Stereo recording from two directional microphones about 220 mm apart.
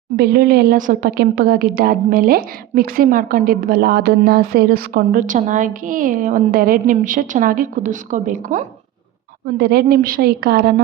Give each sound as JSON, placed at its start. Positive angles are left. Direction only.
{"t": 0.2, "sound": "a woman's voice", "side_deg": -45}